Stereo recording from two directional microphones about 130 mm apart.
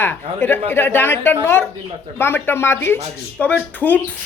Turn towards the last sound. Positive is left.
turn(degrees=15)  # may be behind; listen again after turning